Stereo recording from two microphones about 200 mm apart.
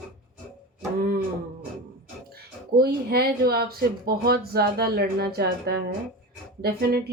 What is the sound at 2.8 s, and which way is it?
Speech, 50° right (ahead or behind).